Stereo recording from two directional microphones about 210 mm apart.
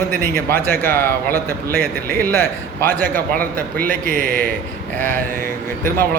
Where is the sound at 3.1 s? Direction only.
45° right (ahead or behind).